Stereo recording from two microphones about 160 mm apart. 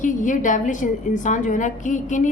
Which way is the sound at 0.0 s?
55° left (ahead or behind).